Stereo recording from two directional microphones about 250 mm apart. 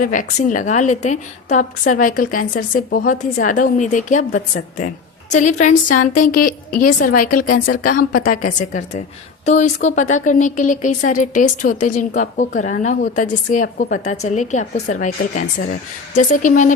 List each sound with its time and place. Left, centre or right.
0.0 s a woman's voice: left